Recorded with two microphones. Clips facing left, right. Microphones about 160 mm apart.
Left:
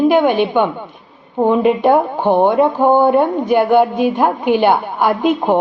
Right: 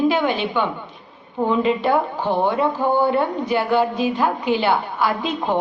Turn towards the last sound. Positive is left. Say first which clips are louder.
# left 7 dB
turn(degrees=50)  # may be behind; listen again after turning